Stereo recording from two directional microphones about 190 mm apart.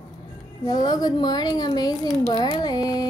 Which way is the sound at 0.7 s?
20° left (ahead or behind).